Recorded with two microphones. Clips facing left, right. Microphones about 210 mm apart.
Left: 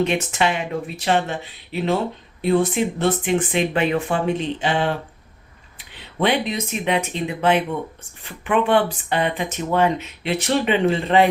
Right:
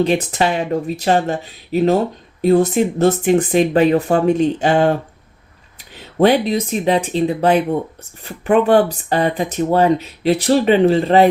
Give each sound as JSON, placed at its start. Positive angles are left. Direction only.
{"t": 0.0, "sound": "speech", "side_deg": -35}